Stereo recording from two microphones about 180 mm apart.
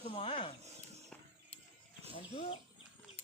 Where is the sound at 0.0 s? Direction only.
30° left (ahead or behind).